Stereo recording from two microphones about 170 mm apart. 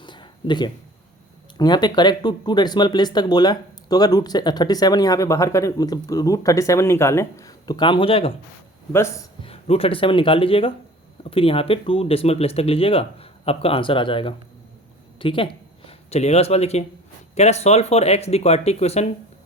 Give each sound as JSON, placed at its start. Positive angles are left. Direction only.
{"t": 0.0, "sound": "a sound", "side_deg": 25}
{"t": 1.5, "sound": "speech", "side_deg": 25}
{"t": 8.9, "sound": "speech", "side_deg": 15}
{"t": 9.4, "sound": "speech", "side_deg": 35}